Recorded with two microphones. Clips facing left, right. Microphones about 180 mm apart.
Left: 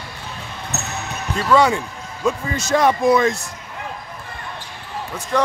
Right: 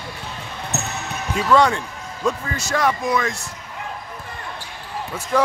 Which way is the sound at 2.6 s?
20° left (ahead or behind).